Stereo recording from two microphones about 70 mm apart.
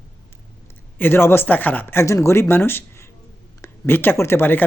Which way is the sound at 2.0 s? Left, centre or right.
Left.